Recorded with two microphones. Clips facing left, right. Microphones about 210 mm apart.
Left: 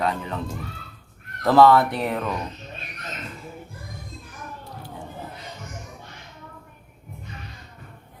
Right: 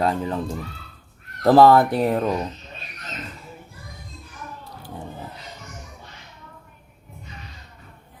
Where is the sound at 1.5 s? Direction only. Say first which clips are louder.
Right 2 dB; 40° right (ahead or behind).